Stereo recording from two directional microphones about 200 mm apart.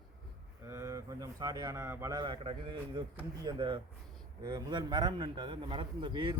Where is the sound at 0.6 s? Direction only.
15° right (ahead or behind).